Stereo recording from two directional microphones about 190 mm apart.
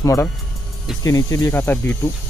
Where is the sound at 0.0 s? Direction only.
15° left (ahead or behind).